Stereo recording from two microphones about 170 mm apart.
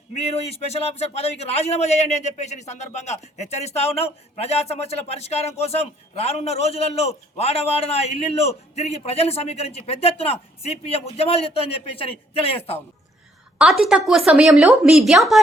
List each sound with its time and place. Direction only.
0.4 s a man's voice: 40° left (ahead or behind)
13.6 s a woman's voice: centre (ahead or behind)